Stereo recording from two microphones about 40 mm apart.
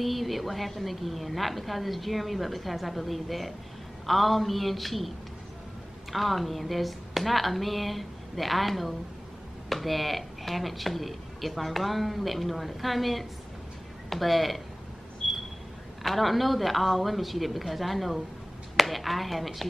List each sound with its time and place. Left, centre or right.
0.0 s speech: centre
6.1 s speech: centre
16.0 s speech: centre